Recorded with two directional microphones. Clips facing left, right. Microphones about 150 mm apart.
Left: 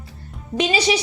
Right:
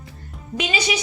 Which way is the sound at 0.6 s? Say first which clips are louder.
Left 5 dB; 35° left (ahead or behind).